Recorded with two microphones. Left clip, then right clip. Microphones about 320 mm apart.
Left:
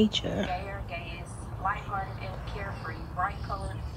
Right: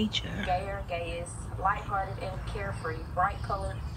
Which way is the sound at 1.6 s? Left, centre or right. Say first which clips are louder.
Right 2 dB; centre.